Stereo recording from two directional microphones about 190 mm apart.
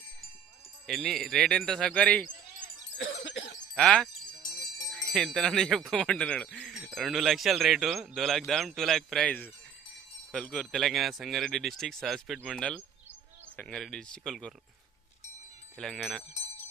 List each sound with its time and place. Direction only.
0.9 s speech: centre (ahead or behind)
2.9 s music: 75° left (ahead or behind)
3.8 s wind chime: 5° left (ahead or behind)
4.9 s speech: centre (ahead or behind)
15.7 s speech: centre (ahead or behind)